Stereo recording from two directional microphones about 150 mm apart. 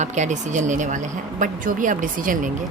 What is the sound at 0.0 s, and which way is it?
A woman's voice, 50° right (ahead or behind).